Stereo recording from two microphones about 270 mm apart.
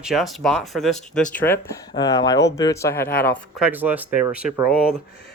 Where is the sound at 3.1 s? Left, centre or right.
Left.